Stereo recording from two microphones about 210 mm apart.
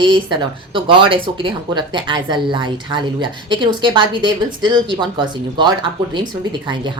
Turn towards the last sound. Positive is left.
turn(degrees=-20)  # may be behind; listen again after turning